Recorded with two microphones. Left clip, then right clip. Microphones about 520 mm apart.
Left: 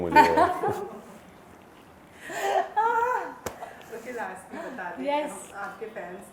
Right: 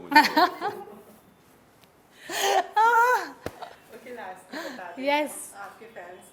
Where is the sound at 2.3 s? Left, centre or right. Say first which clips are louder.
Right 2 dB; right.